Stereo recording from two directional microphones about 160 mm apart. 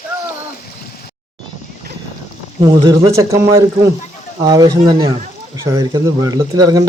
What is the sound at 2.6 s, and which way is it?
Speech, 25° right (ahead or behind).